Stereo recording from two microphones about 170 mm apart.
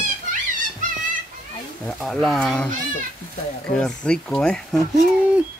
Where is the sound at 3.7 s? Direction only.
5° left (ahead or behind).